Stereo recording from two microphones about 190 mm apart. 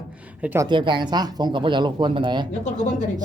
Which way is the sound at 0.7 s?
25° right (ahead or behind).